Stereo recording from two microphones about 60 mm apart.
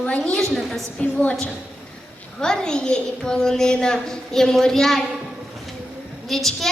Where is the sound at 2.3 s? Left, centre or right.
Centre.